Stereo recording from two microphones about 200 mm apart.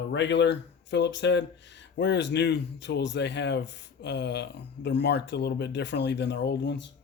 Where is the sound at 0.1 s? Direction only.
60° left (ahead or behind).